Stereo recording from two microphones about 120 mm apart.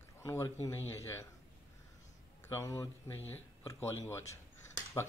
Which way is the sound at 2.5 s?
25° left (ahead or behind).